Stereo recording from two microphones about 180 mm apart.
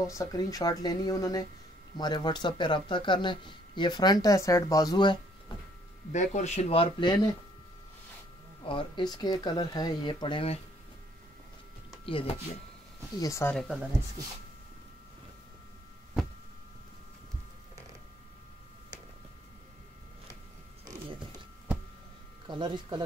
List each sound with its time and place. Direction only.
0.0 s speech: 20° left (ahead or behind)
6.1 s speech: 40° left (ahead or behind)
8.6 s speech: 25° left (ahead or behind)
12.1 s speech: 30° left (ahead or behind)
13.2 s speech: 15° left (ahead or behind)
13.6 s a woman's voice: 5° right (ahead or behind)
22.5 s speech: 25° right (ahead or behind)